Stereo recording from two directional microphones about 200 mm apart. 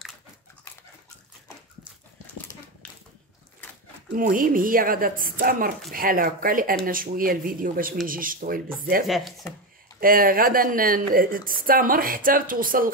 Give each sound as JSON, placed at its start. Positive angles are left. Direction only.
{"t": 4.1, "sound": "a woman's voice", "side_deg": -45}
{"t": 9.0, "sound": "speech", "side_deg": 0}
{"t": 9.9, "sound": "a woman's voice", "side_deg": -45}